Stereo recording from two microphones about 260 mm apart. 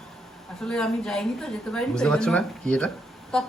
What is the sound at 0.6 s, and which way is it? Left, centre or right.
Speech, centre.